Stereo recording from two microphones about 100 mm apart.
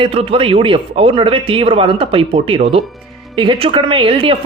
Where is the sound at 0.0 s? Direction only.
70° right (ahead or behind).